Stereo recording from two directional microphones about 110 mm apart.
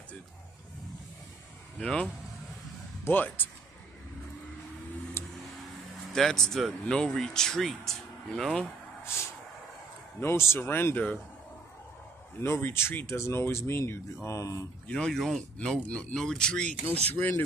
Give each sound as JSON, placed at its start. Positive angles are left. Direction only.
{"t": 1.8, "sound": "speech", "side_deg": 10}
{"t": 3.1, "sound": "speech", "side_deg": 15}
{"t": 5.2, "sound": "a sound", "side_deg": 25}
{"t": 6.1, "sound": "speech", "side_deg": 5}
{"t": 9.1, "sound": "speech", "side_deg": 25}
{"t": 12.4, "sound": "speech", "side_deg": 20}
{"t": 14.9, "sound": "speech", "side_deg": 5}
{"t": 16.7, "sound": "speech", "side_deg": -65}
{"t": 17.1, "sound": "speech", "side_deg": 15}